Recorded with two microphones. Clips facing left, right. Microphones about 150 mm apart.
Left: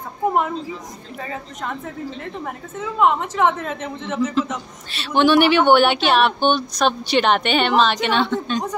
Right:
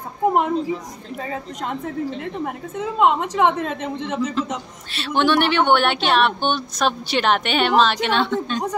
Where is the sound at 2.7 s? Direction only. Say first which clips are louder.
Even; 15° right (ahead or behind).